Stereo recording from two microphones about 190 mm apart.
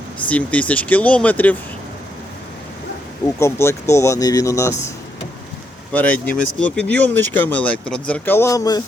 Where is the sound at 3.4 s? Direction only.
15° left (ahead or behind).